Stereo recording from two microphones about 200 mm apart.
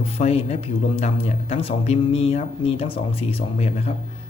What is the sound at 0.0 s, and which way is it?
A man's voice, 30° left (ahead or behind).